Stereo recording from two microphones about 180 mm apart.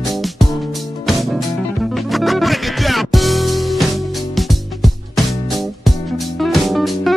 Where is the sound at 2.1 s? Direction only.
Centre (ahead or behind).